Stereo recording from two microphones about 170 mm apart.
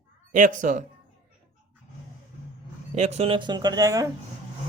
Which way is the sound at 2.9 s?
40° right (ahead or behind).